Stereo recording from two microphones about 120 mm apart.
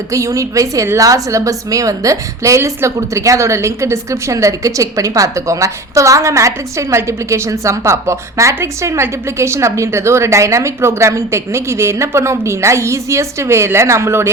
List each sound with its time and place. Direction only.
0.1 s a woman's voice: 25° right (ahead or behind)